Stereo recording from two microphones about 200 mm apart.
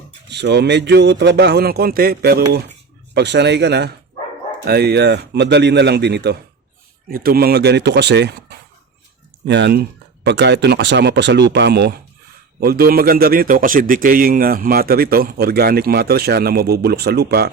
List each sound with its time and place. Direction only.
0.3 s a man's voice: 60° right (ahead or behind)